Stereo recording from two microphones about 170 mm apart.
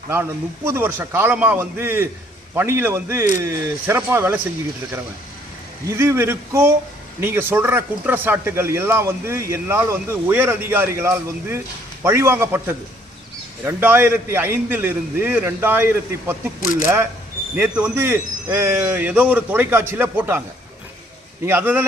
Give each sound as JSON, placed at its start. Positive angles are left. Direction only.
{"t": 0.1, "sound": "speech", "side_deg": -15}
{"t": 5.9, "sound": "speech", "side_deg": -15}
{"t": 21.4, "sound": "speech", "side_deg": -10}